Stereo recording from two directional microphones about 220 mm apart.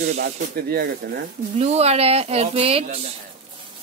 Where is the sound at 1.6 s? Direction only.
30° right (ahead or behind).